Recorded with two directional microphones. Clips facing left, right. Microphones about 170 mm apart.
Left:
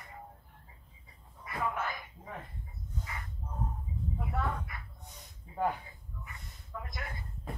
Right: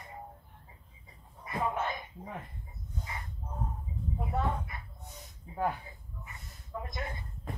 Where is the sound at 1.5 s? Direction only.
25° right (ahead or behind).